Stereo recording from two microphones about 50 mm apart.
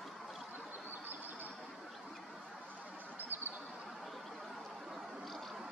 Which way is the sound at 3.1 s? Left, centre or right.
Right.